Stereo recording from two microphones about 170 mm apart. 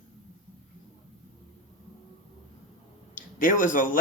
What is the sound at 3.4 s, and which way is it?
Speech, 50° left (ahead or behind).